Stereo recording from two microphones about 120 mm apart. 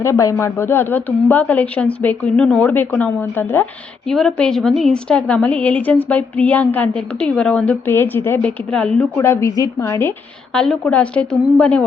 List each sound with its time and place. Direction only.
0.0 s a woman's voice: 25° left (ahead or behind)
4.1 s a woman's voice: 5° left (ahead or behind)
9.1 s a woman's voice: 25° left (ahead or behind)
10.5 s a woman's voice: 10° left (ahead or behind)